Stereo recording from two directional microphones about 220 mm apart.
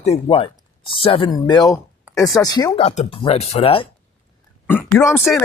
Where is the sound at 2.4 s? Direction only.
15° left (ahead or behind).